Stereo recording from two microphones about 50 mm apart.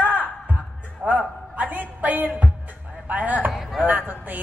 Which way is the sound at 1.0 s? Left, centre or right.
Right.